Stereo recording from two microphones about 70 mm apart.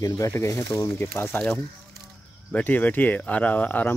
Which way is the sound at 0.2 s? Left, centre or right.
Left.